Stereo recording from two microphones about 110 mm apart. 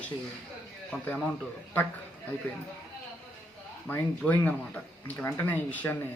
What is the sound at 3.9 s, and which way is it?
Speech, 15° left (ahead or behind).